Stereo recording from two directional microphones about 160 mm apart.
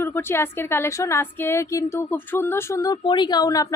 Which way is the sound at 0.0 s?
15° left (ahead or behind).